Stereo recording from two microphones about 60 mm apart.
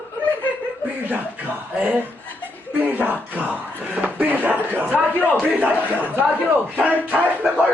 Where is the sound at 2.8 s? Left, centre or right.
Right.